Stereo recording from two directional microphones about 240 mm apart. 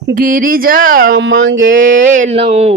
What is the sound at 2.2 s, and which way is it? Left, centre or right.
Speech, right.